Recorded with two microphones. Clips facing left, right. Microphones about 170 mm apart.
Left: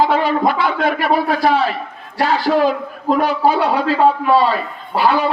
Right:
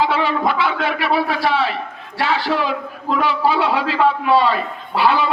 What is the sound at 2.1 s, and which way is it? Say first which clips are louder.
A man's voice: left 4 dB; 40° left (ahead or behind).